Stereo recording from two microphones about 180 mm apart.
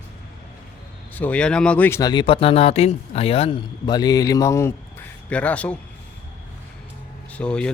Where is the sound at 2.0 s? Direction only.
25° left (ahead or behind); by 5.7 s 5° left (ahead or behind).